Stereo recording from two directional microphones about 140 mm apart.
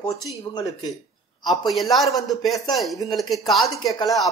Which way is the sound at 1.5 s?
Centre (ahead or behind).